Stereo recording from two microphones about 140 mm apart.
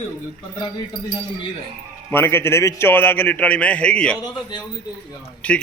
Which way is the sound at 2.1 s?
15° left (ahead or behind).